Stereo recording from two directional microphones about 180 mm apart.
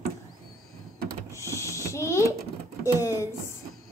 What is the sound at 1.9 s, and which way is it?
A woman's voice, 15° left (ahead or behind).